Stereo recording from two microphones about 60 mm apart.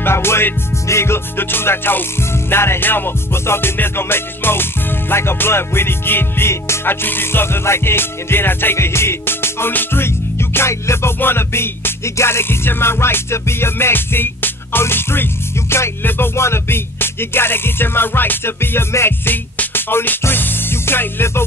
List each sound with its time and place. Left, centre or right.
0.0 s music: left
6.9 s music: left